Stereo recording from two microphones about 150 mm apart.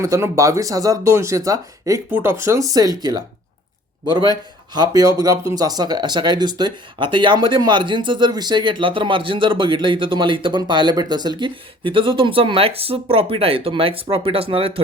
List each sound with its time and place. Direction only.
0.0 s speech: 20° right (ahead or behind)
4.1 s speech: 30° right (ahead or behind)